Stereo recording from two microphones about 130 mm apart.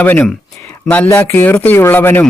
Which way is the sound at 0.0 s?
15° left (ahead or behind).